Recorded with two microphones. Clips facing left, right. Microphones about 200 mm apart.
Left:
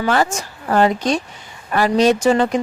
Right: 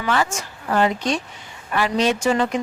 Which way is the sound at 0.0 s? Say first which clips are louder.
Left 4 dB; 35° left (ahead or behind).